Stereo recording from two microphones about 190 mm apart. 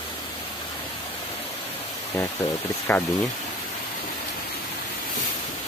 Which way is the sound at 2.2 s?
15° left (ahead or behind).